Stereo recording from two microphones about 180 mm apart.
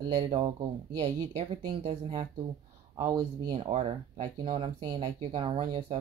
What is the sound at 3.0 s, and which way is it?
Speech, 20° right (ahead or behind).